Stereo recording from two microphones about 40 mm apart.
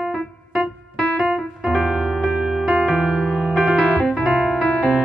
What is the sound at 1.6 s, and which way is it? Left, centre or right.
Music, centre.